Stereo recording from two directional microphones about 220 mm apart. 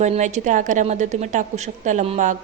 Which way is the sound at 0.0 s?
30° right (ahead or behind).